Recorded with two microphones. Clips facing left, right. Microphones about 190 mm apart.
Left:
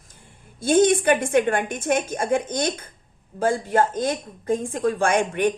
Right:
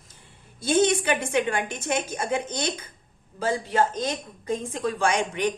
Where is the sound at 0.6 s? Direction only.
50° left (ahead or behind).